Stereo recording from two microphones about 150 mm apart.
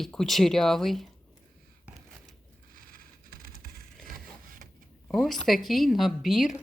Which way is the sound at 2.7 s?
70° right (ahead or behind).